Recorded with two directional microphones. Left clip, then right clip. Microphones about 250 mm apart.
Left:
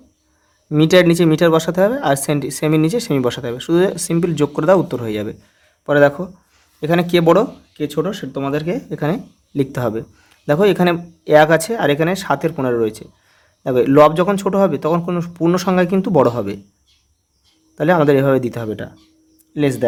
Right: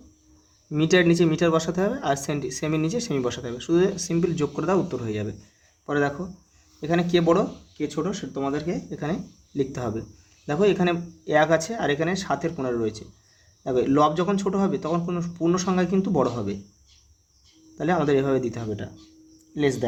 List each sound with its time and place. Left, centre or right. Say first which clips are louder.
0.7 s speech: left 8 dB; left
17.7 s speech: left 9 dB; left